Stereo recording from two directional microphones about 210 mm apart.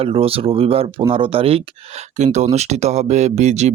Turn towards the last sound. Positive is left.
turn(degrees=-35)  # may be behind; listen again after turning